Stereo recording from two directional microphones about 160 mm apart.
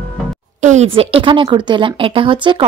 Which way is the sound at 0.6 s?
45° right (ahead or behind).